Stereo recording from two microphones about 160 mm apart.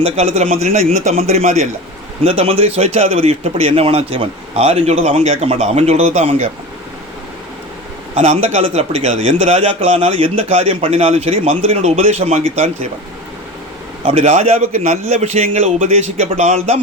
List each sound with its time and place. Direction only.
0.0 s a man's voice: 40° right (ahead or behind)
8.1 s a man's voice: 45° right (ahead or behind)
14.0 s a man's voice: 40° right (ahead or behind)